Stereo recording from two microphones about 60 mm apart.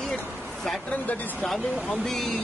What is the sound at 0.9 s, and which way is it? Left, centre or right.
Speech, left.